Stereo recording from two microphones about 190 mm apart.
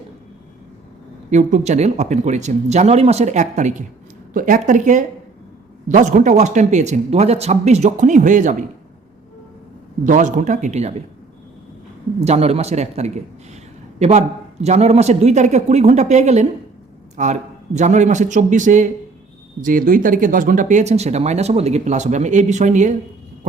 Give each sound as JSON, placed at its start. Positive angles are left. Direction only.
{"t": 1.3, "sound": "speech", "side_deg": -40}
{"t": 10.0, "sound": "speech", "side_deg": -40}
{"t": 12.2, "sound": "speech", "side_deg": -35}